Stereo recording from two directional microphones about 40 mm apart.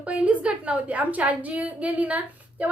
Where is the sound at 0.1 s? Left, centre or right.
Right.